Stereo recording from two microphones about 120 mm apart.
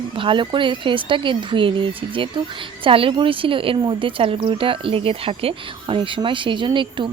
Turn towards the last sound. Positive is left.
turn(degrees=-40)  # may be behind; listen again after turning